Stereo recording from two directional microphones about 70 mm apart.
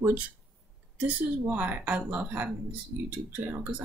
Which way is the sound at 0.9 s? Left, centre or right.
Right.